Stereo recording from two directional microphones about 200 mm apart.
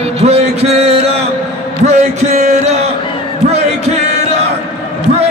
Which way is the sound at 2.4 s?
35° right (ahead or behind).